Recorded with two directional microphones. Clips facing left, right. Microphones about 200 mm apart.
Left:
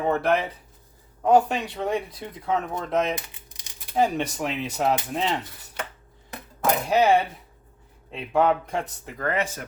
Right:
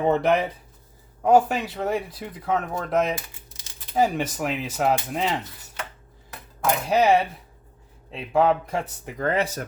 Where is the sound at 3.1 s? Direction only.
15° left (ahead or behind).